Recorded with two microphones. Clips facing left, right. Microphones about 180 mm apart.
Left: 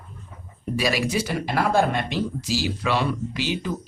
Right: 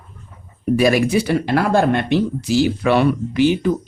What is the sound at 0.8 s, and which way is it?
Speech, 55° right (ahead or behind).